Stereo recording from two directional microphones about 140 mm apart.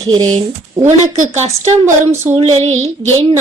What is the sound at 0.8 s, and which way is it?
A woman's voice, 55° right (ahead or behind).